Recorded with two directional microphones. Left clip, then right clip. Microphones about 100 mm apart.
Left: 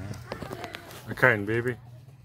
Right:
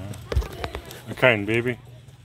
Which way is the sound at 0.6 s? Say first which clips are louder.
Right 9 dB; 15° right (ahead or behind).